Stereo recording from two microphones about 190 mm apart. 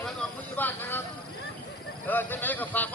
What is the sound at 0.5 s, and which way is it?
Vehicle, 10° left (ahead or behind).